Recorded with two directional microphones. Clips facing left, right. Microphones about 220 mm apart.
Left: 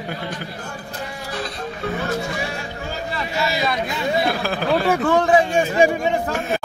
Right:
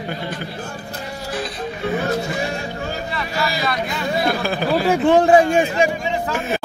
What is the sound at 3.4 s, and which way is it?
Speech, 25° left (ahead or behind).